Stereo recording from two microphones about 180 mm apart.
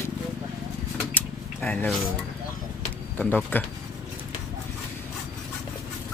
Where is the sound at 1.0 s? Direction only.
5° left (ahead or behind).